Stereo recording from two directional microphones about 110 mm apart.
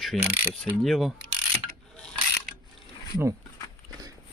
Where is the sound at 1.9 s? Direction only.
5° left (ahead or behind).